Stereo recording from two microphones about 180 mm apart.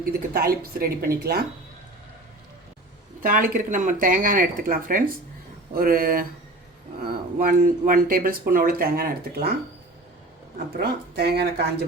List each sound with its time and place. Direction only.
0.0 s a woman's voice: 55° right (ahead or behind)
3.2 s speech: 50° right (ahead or behind)
10.8 s a woman's voice: 65° right (ahead or behind)